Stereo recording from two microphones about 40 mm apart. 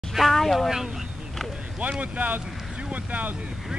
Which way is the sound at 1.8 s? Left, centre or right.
Right.